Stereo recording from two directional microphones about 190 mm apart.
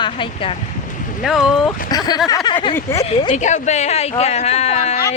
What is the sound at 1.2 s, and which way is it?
Speech, centre (ahead or behind).